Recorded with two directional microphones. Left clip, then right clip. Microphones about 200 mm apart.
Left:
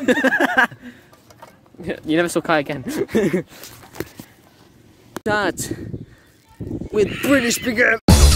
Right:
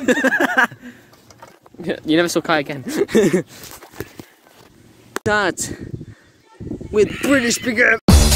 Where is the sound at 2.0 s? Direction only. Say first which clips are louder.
Right 2 dB; 15° right (ahead or behind).